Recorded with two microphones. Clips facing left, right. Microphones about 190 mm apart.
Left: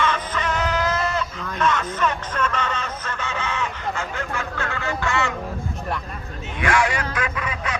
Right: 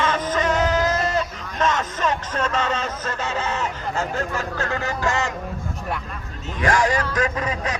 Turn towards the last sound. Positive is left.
turn(degrees=-40)  # may be behind; listen again after turning